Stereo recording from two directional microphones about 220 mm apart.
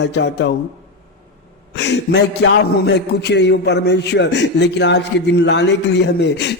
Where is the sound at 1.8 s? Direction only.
50° left (ahead or behind).